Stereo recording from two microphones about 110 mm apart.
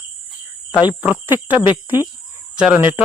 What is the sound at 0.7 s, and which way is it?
Cricket, 15° right (ahead or behind).